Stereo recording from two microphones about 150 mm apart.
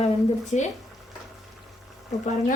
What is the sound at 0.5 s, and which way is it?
Speech, 50° left (ahead or behind).